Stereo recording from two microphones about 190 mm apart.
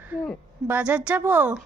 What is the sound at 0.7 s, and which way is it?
Speech, 5° right (ahead or behind).